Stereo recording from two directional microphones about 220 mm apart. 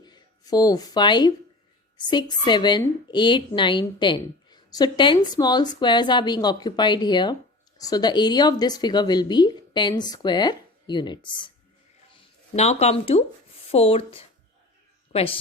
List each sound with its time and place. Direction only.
0.0 s a woman's voice: 20° left (ahead or behind)